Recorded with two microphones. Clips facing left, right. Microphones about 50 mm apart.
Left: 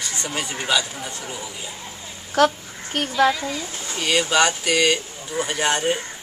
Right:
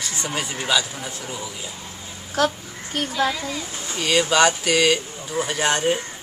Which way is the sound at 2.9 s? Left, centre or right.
Left.